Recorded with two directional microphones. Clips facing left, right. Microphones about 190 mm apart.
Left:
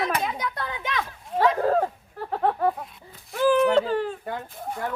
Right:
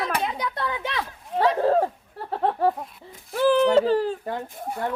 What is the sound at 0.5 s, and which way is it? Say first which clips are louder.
Speech: right 2 dB; 30° right (ahead or behind).